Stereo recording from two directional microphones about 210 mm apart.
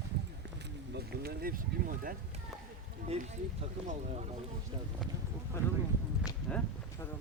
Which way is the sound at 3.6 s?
30° right (ahead or behind).